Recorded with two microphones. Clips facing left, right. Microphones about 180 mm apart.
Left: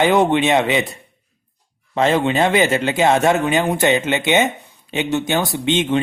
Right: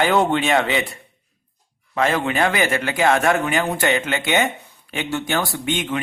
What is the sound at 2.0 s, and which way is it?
Speech, 25° left (ahead or behind).